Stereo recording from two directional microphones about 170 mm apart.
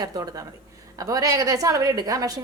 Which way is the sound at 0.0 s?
20° right (ahead or behind).